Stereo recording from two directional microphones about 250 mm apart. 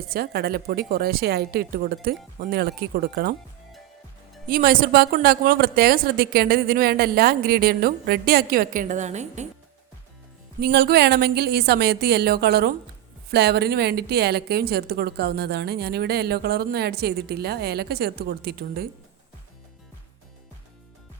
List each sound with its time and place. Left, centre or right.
0.1 s a woman's voice: right
4.4 s a woman's voice: right
10.6 s a woman's voice: right